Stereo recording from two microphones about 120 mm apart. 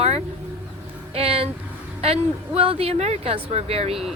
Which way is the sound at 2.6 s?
50° right (ahead or behind).